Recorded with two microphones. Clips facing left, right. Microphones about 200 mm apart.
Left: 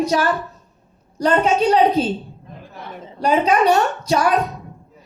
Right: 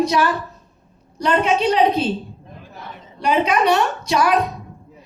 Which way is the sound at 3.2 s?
40° left (ahead or behind).